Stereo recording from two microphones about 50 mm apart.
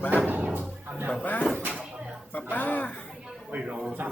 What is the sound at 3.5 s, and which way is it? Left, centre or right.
Speech, right.